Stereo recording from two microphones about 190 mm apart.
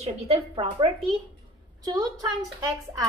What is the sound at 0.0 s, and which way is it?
Speech, 30° right (ahead or behind).